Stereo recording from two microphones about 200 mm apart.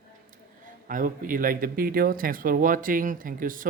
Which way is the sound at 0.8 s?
45° right (ahead or behind).